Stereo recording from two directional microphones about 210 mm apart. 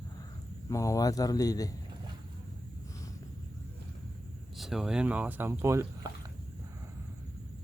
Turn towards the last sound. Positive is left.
turn(degrees=-15)  # may be behind; listen again after turning